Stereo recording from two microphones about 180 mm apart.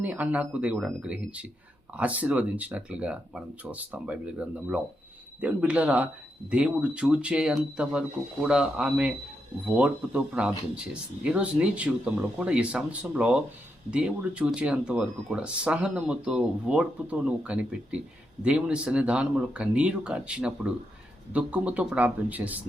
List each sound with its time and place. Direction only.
0.0 s speech: 10° right (ahead or behind)